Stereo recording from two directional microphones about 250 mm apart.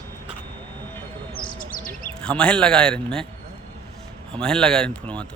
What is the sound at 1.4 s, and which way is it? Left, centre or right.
Speech, left.